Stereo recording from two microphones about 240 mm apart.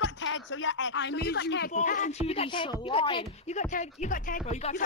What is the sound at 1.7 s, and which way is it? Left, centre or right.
Speech, left.